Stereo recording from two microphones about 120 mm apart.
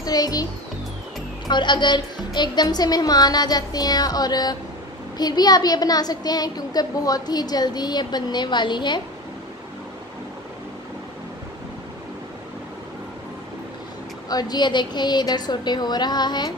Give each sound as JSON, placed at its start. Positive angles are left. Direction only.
{"t": 0.0, "sound": "a child's voice", "side_deg": 30}
{"t": 1.5, "sound": "a woman's voice", "side_deg": 40}
{"t": 14.3, "sound": "a woman's voice", "side_deg": 35}